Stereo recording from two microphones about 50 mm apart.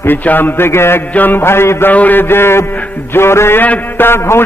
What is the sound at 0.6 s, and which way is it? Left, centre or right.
Speech, left.